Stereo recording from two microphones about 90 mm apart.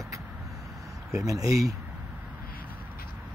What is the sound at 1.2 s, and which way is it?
Speech, 40° right (ahead or behind).